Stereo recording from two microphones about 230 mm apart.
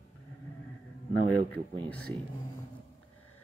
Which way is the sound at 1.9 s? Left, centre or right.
Centre.